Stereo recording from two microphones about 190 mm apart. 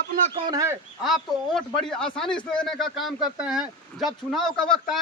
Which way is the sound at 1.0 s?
Centre (ahead or behind).